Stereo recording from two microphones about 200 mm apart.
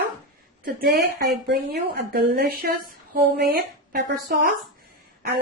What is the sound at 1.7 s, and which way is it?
A woman's voice, 50° right (ahead or behind).